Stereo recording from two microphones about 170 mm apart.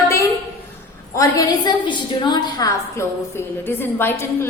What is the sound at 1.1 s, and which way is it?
A woman's voice, 20° left (ahead or behind).